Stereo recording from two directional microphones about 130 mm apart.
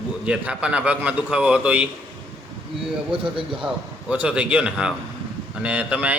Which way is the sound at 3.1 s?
40° right (ahead or behind).